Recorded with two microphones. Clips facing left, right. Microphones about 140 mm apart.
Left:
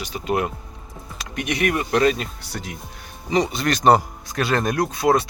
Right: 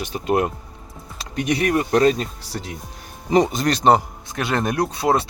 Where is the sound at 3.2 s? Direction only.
50° right (ahead or behind).